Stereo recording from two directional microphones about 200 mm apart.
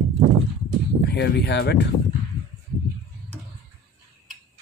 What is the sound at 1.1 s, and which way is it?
Speech, 55° left (ahead or behind).